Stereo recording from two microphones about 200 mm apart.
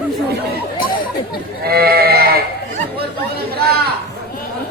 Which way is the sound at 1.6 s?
50° right (ahead or behind).